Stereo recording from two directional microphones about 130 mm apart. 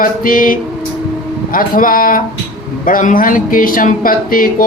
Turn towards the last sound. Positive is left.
turn(degrees=90)